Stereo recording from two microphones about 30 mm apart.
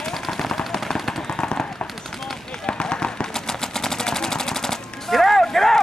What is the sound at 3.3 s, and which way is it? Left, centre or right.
Machine gun, centre.